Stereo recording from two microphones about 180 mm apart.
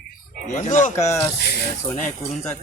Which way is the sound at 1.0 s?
15° left (ahead or behind).